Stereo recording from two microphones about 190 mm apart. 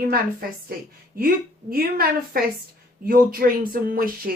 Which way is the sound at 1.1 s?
50° right (ahead or behind).